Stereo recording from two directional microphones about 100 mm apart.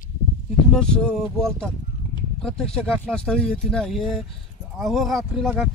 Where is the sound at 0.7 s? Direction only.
5° left (ahead or behind).